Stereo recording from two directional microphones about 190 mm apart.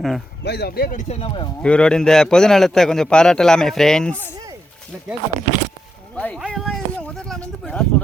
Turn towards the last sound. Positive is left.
turn(degrees=5)  # may be behind; listen again after turning